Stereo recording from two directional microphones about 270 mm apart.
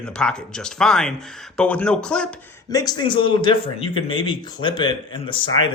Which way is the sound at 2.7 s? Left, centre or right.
Centre.